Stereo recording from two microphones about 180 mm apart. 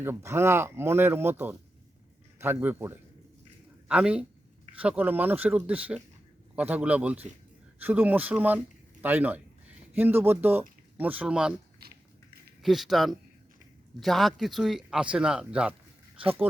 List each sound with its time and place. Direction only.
0.0 s a man's voice: 15° right (ahead or behind)
12.6 s a man's voice: centre (ahead or behind)